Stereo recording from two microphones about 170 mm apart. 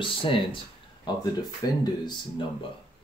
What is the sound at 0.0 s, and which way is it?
Speech, 30° left (ahead or behind).